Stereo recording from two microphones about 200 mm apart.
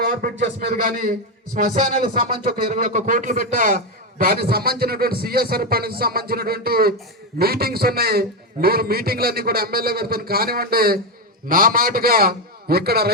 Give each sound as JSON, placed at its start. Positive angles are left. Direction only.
{"t": 0.0, "sound": "a man's voice", "side_deg": -45}